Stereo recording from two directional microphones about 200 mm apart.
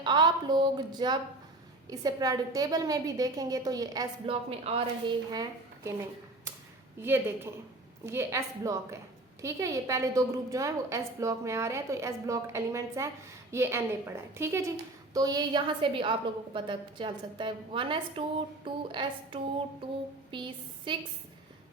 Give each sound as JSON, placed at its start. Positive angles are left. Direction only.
{"t": 0.0, "sound": "a woman's voice", "side_deg": -20}
{"t": 4.4, "sound": "a woman's voice", "side_deg": -30}